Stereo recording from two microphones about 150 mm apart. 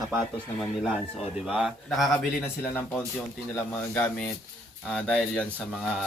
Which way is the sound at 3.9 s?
10° left (ahead or behind).